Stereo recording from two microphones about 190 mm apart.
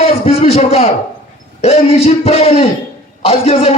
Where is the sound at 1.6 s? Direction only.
30° left (ahead or behind).